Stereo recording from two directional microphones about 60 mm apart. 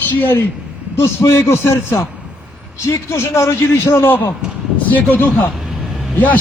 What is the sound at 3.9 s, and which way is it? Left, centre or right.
A man's voice, left.